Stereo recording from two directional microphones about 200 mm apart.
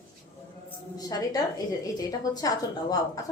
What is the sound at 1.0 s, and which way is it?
A woman's voice, 20° left (ahead or behind).